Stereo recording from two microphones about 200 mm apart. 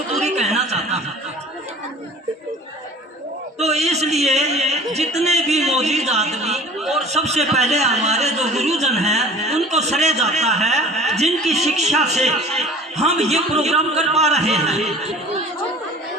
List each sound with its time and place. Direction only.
0.2 s chuckle: 35° right (ahead or behind)
3.6 s a man's voice: 35° right (ahead or behind)
6.7 s a sound: centre (ahead or behind)
7.0 s a man's voice: 35° right (ahead or behind)